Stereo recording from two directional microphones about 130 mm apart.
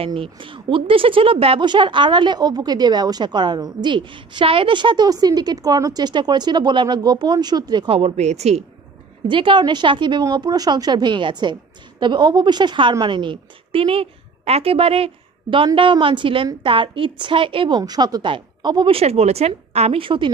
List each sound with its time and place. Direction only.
0.0 s speech: 45° right (ahead or behind)
8.0 s speech: 60° right (ahead or behind)
9.3 s a woman's voice: 40° right (ahead or behind)